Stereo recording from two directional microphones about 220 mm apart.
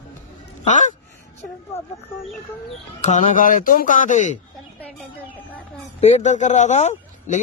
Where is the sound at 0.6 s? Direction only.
35° left (ahead or behind).